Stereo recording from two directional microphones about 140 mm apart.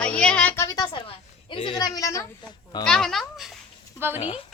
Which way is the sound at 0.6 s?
25° left (ahead or behind).